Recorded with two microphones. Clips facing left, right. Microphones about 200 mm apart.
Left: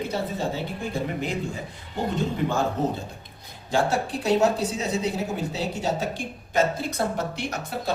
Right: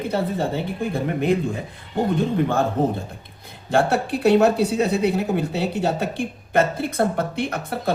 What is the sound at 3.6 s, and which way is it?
A woman's voice, 60° right (ahead or behind).